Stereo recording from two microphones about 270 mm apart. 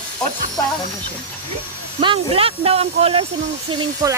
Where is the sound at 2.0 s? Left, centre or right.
Centre.